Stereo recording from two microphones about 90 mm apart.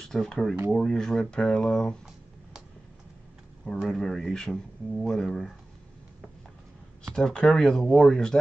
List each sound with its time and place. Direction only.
0.0 s speech: 5° left (ahead or behind)
3.9 s speech: 5° left (ahead or behind)
7.2 s speech: 5° left (ahead or behind)